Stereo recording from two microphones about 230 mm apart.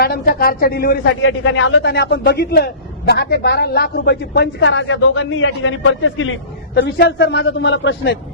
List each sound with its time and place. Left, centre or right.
0.0 s a woman's voice: left
1.2 s a man's voice: left
6.7 s a man's voice: left